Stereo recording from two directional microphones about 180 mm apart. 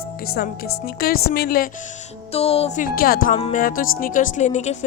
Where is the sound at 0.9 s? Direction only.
55° left (ahead or behind).